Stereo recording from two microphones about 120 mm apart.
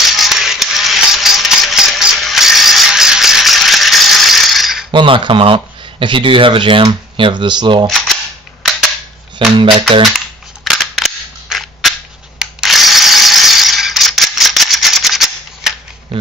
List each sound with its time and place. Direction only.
0.0 s music: centre (ahead or behind)
4.9 s speech: 45° right (ahead or behind)
9.6 s speech: 45° right (ahead or behind)
10.1 s cap gun: centre (ahead or behind)
12.4 s ratchet: 5° right (ahead or behind)